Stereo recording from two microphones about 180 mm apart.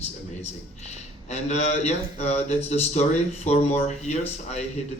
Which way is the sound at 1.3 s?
40° left (ahead or behind).